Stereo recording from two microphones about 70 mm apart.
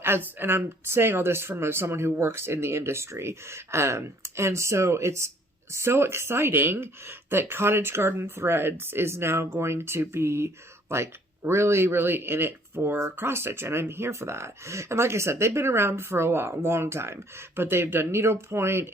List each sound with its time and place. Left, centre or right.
0.0 s speech: right